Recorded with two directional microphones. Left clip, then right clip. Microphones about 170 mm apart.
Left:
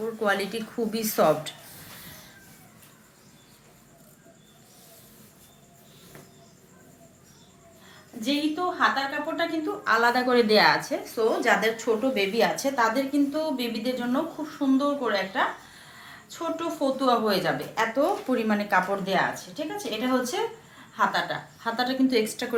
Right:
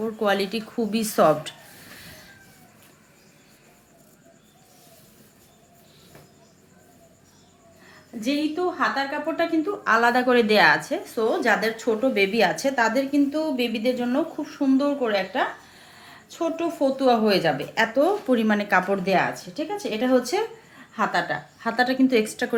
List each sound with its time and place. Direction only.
0.2 s a woman's voice: 30° right (ahead or behind)
8.2 s a woman's voice: 45° right (ahead or behind)